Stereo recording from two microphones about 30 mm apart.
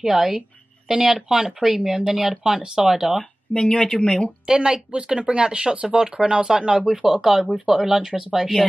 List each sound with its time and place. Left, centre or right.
0.0 s speech: centre
2.9 s speech: centre
3.5 s speech: left
4.5 s speech: right
8.1 s speech: right